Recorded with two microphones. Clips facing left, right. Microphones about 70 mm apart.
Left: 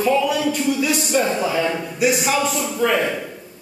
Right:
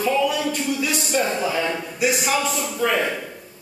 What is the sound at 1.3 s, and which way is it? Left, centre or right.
Speech, centre.